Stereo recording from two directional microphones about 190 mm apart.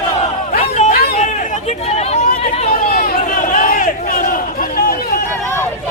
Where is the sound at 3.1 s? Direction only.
45° left (ahead or behind).